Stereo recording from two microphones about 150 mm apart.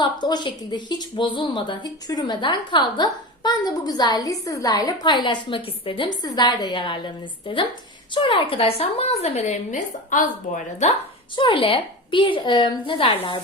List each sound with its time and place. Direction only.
0.0 s a woman's voice: 30° left (ahead or behind); by 10.9 s 55° left (ahead or behind)
11.3 s a woman's voice: 35° left (ahead or behind)